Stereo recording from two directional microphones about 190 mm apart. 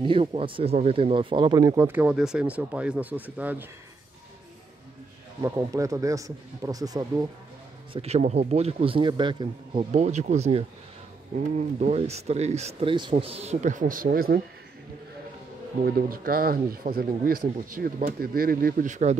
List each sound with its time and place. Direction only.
0.0 s speech: 25° right (ahead or behind); by 3.6 s 10° right (ahead or behind)
5.4 s speech: 15° right (ahead or behind)
7.9 s speech: 35° right (ahead or behind); by 14.4 s 50° right (ahead or behind)
15.8 s speech: 50° right (ahead or behind)